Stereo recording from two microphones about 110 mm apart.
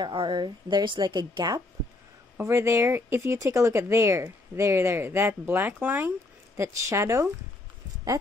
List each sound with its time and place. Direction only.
0.0 s a woman's voice: 45° right (ahead or behind)
2.3 s speech: 25° right (ahead or behind)
6.5 s speech: 25° right (ahead or behind)